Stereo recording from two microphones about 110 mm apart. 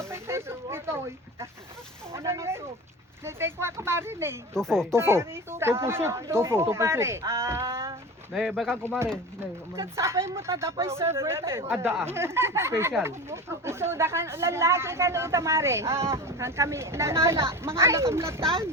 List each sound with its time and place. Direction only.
0.1 s speech: 25° right (ahead or behind)
4.5 s speech: 5° left (ahead or behind)
4.9 s speech: 25° right (ahead or behind)
8.3 s speech: centre (ahead or behind)
8.8 s speech: 20° right (ahead or behind)